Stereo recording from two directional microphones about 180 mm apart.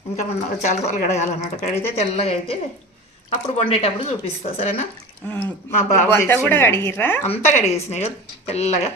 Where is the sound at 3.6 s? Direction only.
35° left (ahead or behind).